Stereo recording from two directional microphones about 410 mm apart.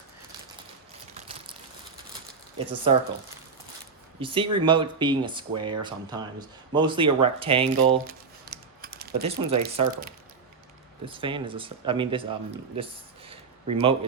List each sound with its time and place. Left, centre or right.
2.9 s speech: centre
4.2 s speech: centre